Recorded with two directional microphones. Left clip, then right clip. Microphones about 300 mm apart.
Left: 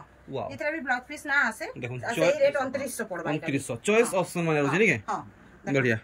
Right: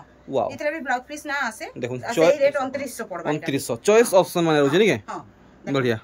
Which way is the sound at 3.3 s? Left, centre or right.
Centre.